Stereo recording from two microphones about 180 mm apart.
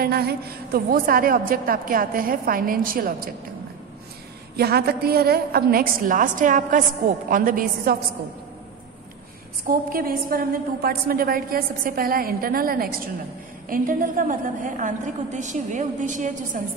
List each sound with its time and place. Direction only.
0.0 s a woman's voice: 60° right (ahead or behind)
4.6 s a woman's voice: 60° right (ahead or behind)
9.7 s a woman's voice: 55° right (ahead or behind)